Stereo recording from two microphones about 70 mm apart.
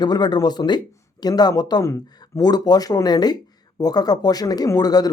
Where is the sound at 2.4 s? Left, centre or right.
Left.